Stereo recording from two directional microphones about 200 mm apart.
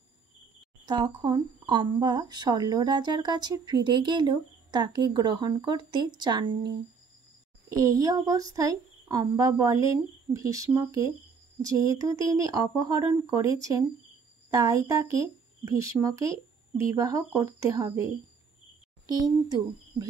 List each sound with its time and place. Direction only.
0.8 s speech: 20° right (ahead or behind)